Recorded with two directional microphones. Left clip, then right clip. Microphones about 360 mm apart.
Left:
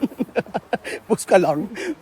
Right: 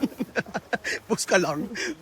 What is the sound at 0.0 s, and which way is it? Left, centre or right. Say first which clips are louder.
A man's voice: left 5 dB; centre.